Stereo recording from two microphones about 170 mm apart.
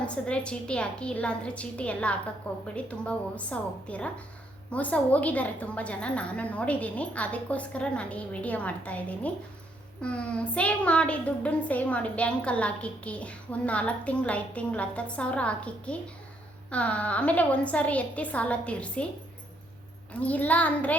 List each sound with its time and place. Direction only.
0.0 s a woman's voice: 5° left (ahead or behind)
20.1 s a woman's voice: 10° left (ahead or behind)